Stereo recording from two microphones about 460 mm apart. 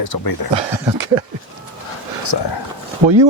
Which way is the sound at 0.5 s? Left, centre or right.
Right.